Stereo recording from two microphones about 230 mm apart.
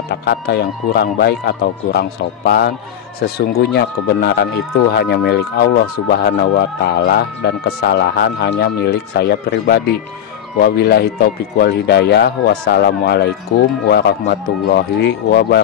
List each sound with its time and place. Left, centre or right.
0.2 s speech: left